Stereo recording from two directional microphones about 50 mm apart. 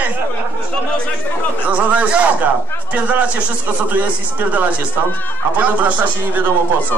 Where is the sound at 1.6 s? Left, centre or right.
Right.